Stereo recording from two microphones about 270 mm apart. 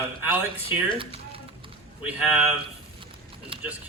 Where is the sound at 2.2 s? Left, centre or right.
Centre.